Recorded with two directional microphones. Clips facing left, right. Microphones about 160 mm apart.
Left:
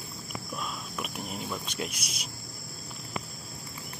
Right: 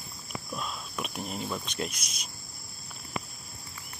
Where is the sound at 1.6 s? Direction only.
10° left (ahead or behind).